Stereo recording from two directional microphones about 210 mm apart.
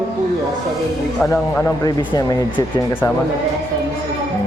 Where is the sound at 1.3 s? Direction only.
10° left (ahead or behind).